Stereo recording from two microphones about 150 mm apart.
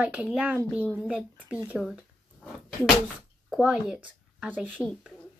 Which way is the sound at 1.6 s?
5° right (ahead or behind).